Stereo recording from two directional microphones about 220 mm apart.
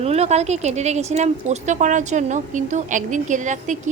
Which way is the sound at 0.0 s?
30° right (ahead or behind).